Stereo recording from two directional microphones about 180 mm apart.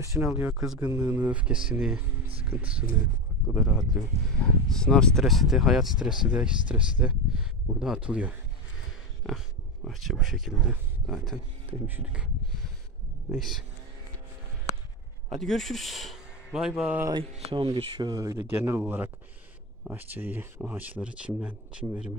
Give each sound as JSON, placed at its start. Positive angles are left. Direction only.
{"t": 0.0, "sound": "speech", "side_deg": -15}
{"t": 13.3, "sound": "speech", "side_deg": 0}
{"t": 15.2, "sound": "speech", "side_deg": 0}
{"t": 17.1, "sound": "mantra", "side_deg": -30}
{"t": 17.6, "sound": "speech", "side_deg": -25}